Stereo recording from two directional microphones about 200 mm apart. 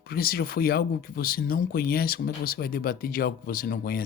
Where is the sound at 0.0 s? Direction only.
50° left (ahead or behind).